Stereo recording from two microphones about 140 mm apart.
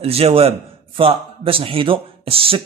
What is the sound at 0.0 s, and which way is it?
Speech, 45° right (ahead or behind).